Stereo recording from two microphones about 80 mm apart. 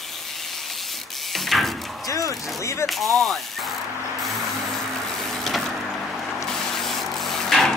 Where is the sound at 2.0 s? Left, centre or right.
Left.